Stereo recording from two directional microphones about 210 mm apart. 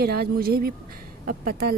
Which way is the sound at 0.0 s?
45° right (ahead or behind).